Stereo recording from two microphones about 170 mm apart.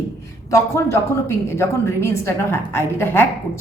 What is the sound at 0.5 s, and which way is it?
A woman's voice, 15° left (ahead or behind).